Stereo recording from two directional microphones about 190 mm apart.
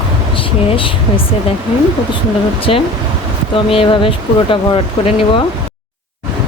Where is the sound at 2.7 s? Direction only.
30° left (ahead or behind).